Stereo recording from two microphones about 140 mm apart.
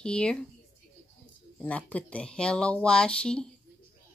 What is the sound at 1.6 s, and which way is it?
Speech, 10° left (ahead or behind).